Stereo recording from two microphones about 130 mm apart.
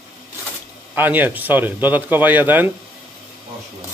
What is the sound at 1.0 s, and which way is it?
Speech, 15° right (ahead or behind).